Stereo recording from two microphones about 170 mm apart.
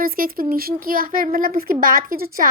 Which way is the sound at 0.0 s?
60° right (ahead or behind).